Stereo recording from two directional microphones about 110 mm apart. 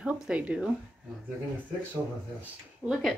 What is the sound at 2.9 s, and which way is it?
Speech, centre (ahead or behind).